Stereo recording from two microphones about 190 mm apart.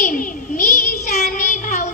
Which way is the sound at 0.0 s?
45° left (ahead or behind).